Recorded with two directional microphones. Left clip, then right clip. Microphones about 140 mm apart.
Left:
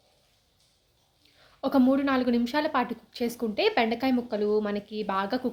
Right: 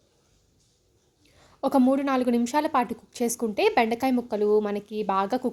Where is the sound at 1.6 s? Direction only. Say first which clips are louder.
Right 2 dB; 45° right (ahead or behind).